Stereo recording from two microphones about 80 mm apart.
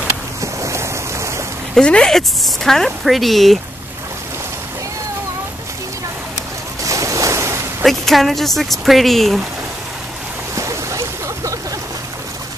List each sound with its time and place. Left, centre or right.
0.4 s ocean: right
1.8 s a woman's voice: centre
6.8 s waves: right
7.8 s a woman's voice: centre
10.5 s boat: right